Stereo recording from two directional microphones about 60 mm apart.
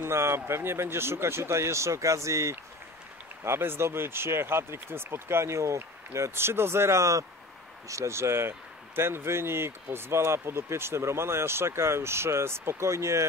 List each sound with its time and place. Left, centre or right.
0.0 s speech: right
3.4 s speech: right